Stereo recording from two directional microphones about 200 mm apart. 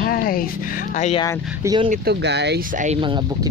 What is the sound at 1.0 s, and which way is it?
Speech, 35° left (ahead or behind).